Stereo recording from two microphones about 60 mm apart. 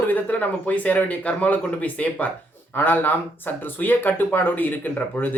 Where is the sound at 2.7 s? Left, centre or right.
Left.